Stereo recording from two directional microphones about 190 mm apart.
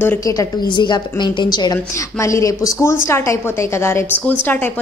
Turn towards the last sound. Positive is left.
turn(degrees=10)  # may be behind; listen again after turning